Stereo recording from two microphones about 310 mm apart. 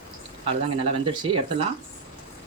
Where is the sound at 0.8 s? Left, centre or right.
Centre.